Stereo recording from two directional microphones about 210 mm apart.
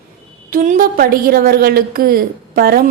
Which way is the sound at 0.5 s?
40° right (ahead or behind).